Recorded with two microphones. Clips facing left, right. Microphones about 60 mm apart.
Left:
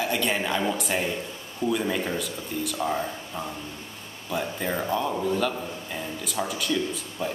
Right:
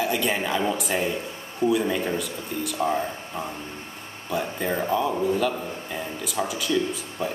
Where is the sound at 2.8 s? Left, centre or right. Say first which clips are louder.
Right 4 dB; centre.